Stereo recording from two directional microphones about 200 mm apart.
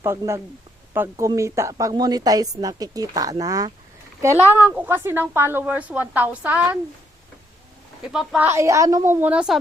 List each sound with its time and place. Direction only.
0.0 s a woman's voice: 15° right (ahead or behind)
8.0 s speech: centre (ahead or behind)
8.4 s a woman's voice: 15° right (ahead or behind)